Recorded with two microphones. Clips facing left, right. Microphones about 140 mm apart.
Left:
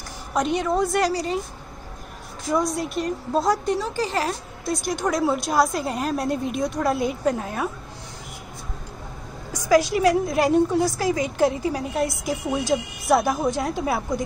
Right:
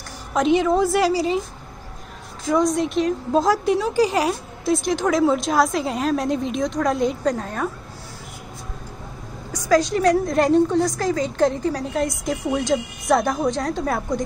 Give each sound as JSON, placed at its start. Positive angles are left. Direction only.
{"t": 0.3, "sound": "a woman's voice", "side_deg": 0}
{"t": 2.5, "sound": "a woman's voice", "side_deg": 5}
{"t": 4.8, "sound": "a woman's voice", "side_deg": 0}
{"t": 9.7, "sound": "a woman's voice", "side_deg": 10}